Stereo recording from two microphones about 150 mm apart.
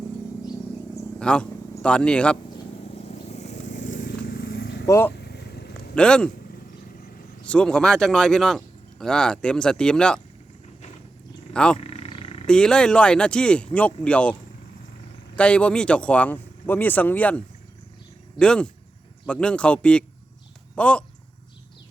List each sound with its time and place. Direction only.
1.2 s speech: 5° left (ahead or behind)
3.0 s vehicle: 45° left (ahead or behind); by 4.7 s 90° left
4.9 s speech: 15° left (ahead or behind)
5.2 s vehicle: 90° left
5.9 s speech: 5° left (ahead or behind)
7.4 s speech: 5° left (ahead or behind)
11.5 s speech: 5° left (ahead or behind)
11.8 s wild animals: 45° left (ahead or behind)
12.5 s speech: 5° left (ahead or behind)
15.4 s speech: 5° left (ahead or behind)